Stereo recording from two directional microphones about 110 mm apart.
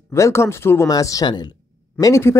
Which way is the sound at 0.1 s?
25° left (ahead or behind).